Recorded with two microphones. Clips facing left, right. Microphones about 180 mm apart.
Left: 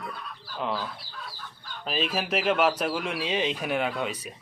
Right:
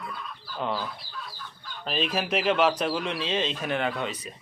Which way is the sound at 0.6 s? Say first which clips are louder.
Right 1 dB; centre (ahead or behind).